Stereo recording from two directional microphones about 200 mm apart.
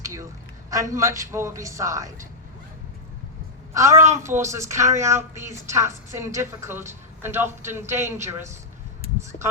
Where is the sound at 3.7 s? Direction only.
15° right (ahead or behind).